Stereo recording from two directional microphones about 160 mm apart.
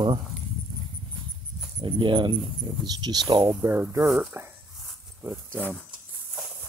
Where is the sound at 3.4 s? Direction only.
10° right (ahead or behind).